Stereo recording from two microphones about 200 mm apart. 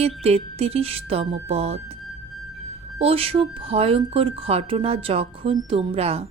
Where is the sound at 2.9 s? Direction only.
30° right (ahead or behind).